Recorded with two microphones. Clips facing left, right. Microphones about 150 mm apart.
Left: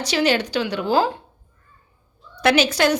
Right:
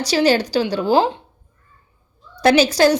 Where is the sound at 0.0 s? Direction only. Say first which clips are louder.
Right 4 dB; 35° right (ahead or behind).